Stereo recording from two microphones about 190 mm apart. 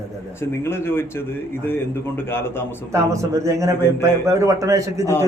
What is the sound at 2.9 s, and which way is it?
A man's voice, 15° right (ahead or behind).